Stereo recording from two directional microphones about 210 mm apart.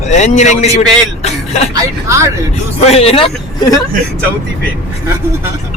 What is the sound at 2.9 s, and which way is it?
Speech, 30° left (ahead or behind).